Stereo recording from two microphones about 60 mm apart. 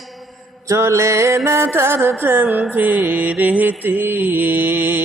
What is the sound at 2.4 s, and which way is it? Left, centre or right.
Mantra, right.